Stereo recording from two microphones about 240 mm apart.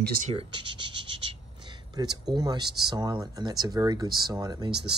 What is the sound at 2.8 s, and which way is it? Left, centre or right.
Speech, centre.